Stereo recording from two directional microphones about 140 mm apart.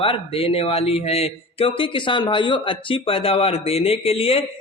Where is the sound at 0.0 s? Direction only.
40° left (ahead or behind).